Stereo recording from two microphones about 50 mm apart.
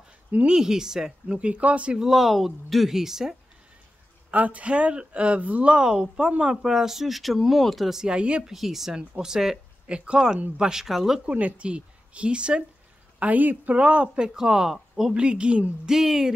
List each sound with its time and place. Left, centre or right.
0.5 s speech: centre; by 2.0 s right
2.0 s speech: centre
4.3 s speech: right; by 8.0 s centre
8.0 s speech: centre
8.5 s speech: centre
9.8 s speech: right; by 11.1 s centre
11.2 s speech: right
13.2 s speech: right; by 15.1 s centre
15.1 s speech: right
15.8 s speech: centre